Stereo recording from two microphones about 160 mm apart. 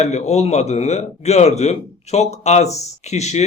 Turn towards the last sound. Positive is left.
turn(degrees=45)  # may be behind; listen again after turning